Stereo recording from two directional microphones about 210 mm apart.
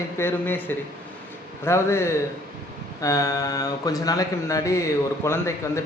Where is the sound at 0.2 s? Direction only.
10° left (ahead or behind).